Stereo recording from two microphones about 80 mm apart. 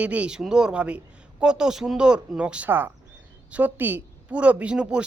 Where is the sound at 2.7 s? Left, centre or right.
Right.